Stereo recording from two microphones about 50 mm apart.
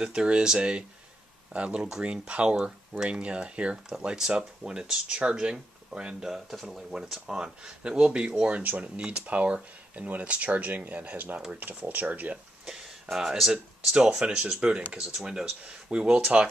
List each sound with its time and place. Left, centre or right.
0.0 s speech: centre
6.3 s speech: centre; by 12.4 s right
12.6 s speech: centre